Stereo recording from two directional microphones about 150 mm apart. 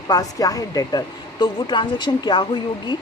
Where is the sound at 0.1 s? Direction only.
25° left (ahead or behind).